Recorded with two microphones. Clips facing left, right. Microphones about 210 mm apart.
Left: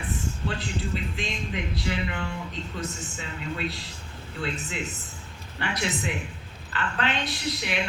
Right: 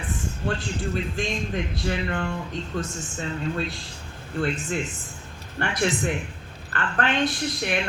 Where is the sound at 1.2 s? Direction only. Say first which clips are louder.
Right 4 dB; 50° right (ahead or behind).